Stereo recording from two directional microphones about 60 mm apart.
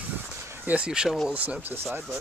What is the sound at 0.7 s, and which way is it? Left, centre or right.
Speech, centre.